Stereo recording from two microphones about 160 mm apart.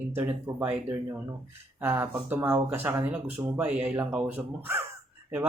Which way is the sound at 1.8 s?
15° right (ahead or behind).